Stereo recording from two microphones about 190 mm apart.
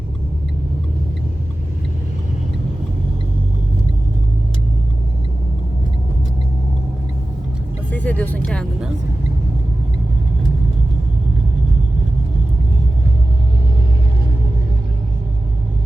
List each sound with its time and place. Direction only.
7.9 s vehicle: 10° left (ahead or behind)